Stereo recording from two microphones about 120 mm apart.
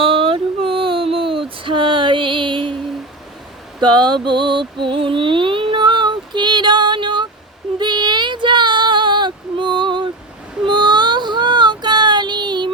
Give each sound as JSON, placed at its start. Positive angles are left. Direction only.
{"t": 0.0, "sound": "female singing", "side_deg": -50}
{"t": 3.8, "sound": "a sound", "side_deg": -40}
{"t": 7.8, "sound": "child singing", "side_deg": -40}